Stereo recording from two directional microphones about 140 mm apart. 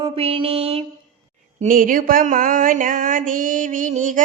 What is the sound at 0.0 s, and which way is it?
Mantra, 40° right (ahead or behind).